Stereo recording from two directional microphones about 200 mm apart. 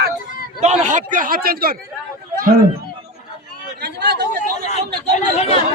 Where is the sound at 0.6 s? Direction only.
35° right (ahead or behind).